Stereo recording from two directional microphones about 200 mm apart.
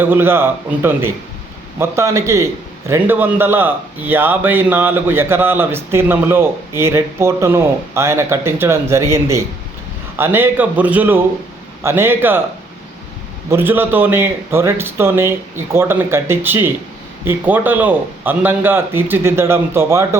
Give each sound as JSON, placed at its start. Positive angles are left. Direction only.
{"t": 0.0, "sound": "a man's voice", "side_deg": -10}
{"t": 13.5, "sound": "a man's voice", "side_deg": -10}